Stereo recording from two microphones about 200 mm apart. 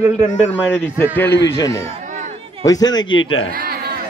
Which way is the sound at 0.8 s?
10° left (ahead or behind).